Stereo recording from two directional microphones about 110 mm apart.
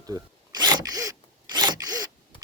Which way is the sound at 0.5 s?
40° right (ahead or behind).